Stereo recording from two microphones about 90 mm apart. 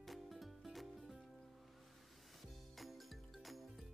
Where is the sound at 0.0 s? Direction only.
Centre (ahead or behind).